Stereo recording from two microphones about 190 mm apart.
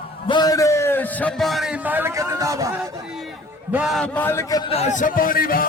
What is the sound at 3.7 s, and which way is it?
A man's voice, 5° right (ahead or behind).